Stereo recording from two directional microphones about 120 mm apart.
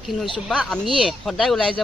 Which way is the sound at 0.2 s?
Centre (ahead or behind).